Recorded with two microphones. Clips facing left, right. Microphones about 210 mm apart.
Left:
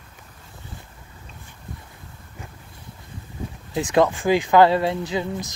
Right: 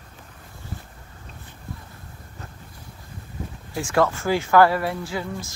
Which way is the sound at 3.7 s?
20° left (ahead or behind).